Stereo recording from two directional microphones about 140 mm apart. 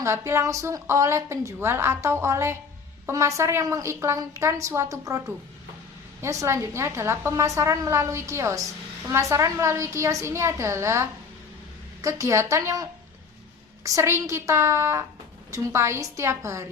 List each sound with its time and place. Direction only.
0.0 s a woman's voice: 20° right (ahead or behind)
6.2 s a woman's voice: 20° right (ahead or behind)